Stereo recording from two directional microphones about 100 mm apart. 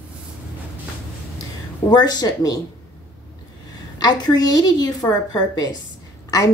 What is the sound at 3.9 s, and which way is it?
A woman's voice, 40° left (ahead or behind).